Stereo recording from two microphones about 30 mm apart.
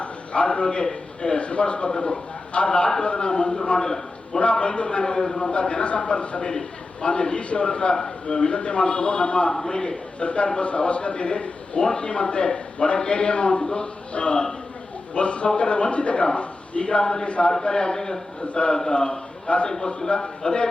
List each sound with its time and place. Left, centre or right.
0.0 s a sound: left
1.2 s a man's voice: left
3.8 s a man's voice: centre
4.6 s a man's voice: left
5.4 s a man's voice: left
10.2 s a man's voice: left
17.2 s a man's voice: left
17.6 s a man's voice: left
18.5 s a man's voice: left
19.6 s a man's voice: left